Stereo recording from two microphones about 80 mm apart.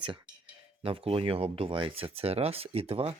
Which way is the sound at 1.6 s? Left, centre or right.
Right.